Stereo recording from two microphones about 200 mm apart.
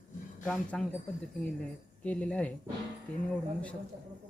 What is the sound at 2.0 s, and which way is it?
Speech, 5° left (ahead or behind).